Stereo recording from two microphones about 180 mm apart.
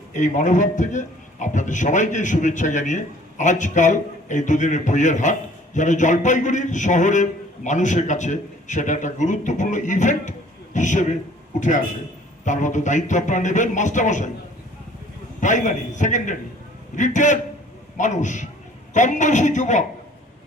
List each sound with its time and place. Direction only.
0.1 s a man's voice: 45° left (ahead or behind)
12.5 s a man's voice: 45° left (ahead or behind)
15.4 s a man's voice: 45° left (ahead or behind)